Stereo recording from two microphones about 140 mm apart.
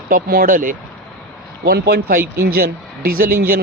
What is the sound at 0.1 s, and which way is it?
Speech, 85° right.